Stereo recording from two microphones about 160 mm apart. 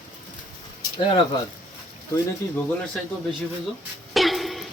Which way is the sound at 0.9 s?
30° left (ahead or behind).